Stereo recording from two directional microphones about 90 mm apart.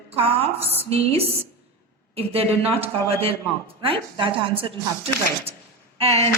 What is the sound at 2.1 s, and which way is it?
A woman's voice, 90° right.